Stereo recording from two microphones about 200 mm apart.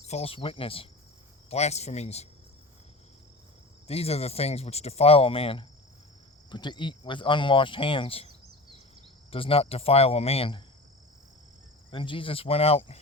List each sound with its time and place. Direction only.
0.1 s speech: 30° left (ahead or behind)
3.8 s speech: 30° left (ahead or behind)
9.3 s speech: 30° left (ahead or behind)
11.9 s speech: 25° left (ahead or behind)